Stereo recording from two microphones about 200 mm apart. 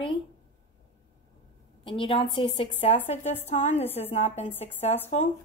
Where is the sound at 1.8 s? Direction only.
25° left (ahead or behind).